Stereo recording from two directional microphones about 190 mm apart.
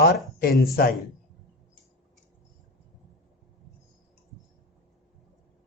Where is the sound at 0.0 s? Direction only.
55° left (ahead or behind).